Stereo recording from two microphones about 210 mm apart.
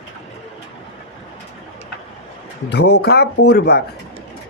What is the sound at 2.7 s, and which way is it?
Speech, 50° left (ahead or behind).